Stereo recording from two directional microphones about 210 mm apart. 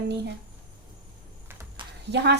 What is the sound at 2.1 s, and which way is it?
Speech, 55° right (ahead or behind).